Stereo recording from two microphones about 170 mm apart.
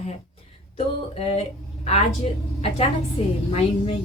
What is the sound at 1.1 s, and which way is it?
Speech, 35° left (ahead or behind).